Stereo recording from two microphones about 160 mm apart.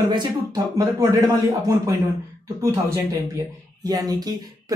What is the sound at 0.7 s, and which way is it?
Speech, 20° right (ahead or behind).